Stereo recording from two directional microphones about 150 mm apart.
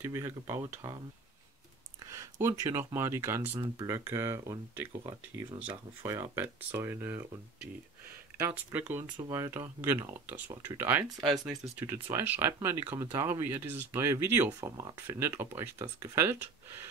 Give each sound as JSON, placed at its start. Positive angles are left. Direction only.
{"t": 0.0, "sound": "speech", "side_deg": -20}
{"t": 2.0, "sound": "speech", "side_deg": -20}
{"t": 8.5, "sound": "speech", "side_deg": -10}